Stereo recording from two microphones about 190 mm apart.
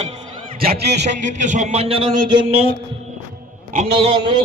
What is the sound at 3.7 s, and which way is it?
Speech, 40° right (ahead or behind).